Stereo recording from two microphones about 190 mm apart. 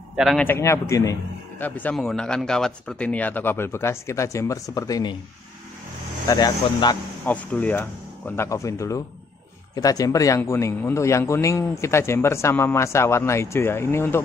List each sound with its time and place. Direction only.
0.1 s speech: centre (ahead or behind)
0.5 s a man's voice: 15° left (ahead or behind)
6.2 s speech: 20° left (ahead or behind)
7.2 s a man's voice: 10° left (ahead or behind)